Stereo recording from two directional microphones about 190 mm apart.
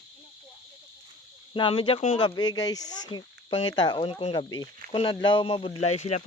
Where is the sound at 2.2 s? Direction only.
20° left (ahead or behind).